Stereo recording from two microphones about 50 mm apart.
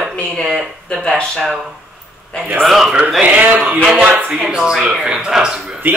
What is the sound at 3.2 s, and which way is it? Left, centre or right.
Speech, right.